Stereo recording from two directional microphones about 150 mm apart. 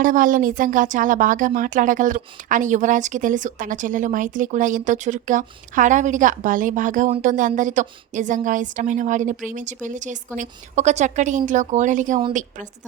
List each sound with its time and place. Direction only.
0.0 s speech: 65° right (ahead or behind)